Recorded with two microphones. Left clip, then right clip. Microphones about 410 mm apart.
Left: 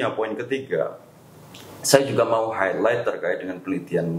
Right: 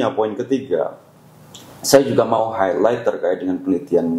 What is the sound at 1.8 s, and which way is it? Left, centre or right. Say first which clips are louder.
A man's voice: right 4 dB; right.